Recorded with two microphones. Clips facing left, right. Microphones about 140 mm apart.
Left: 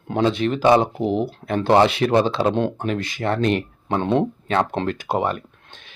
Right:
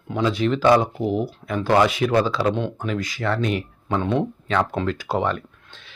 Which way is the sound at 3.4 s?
70° left (ahead or behind).